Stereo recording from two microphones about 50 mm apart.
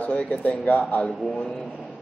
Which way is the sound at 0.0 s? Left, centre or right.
Left.